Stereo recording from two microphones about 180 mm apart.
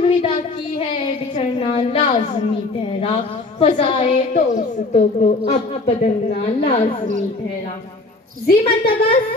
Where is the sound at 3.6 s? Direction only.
30° left (ahead or behind).